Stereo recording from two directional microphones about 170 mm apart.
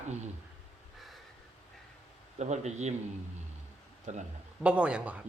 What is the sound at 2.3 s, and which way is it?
Speech, 40° right (ahead or behind).